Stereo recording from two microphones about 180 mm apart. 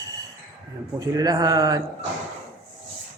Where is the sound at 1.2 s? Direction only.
20° right (ahead or behind).